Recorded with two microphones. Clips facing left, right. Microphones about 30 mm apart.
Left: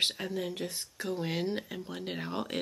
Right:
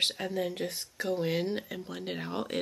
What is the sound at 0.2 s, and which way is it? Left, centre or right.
Speech, centre.